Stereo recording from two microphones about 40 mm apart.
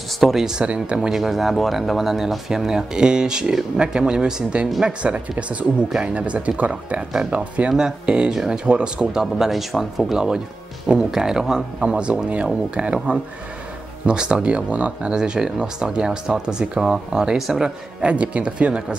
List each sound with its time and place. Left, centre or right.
0.3 s speech: centre
0.7 s speech: centre
1.1 s speech: centre; by 6.7 s right
7.0 s speech: centre
7.3 s speech: right
7.7 s speech: centre
9.2 s speech: centre
10.1 s speech: centre
18.0 s speech: right